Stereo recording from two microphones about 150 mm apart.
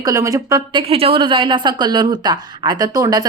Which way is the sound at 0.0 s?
25° right (ahead or behind).